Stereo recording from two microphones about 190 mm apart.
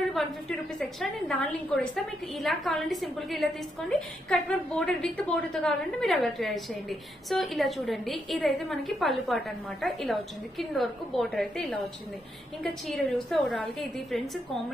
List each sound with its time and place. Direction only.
0.1 s a woman's voice: centre (ahead or behind)